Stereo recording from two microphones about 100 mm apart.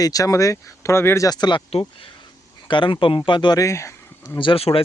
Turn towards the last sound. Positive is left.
turn(degrees=70)  # may be behind; listen again after turning